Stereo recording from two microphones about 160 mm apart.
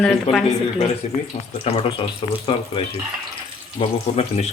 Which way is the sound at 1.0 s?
45° left (ahead or behind).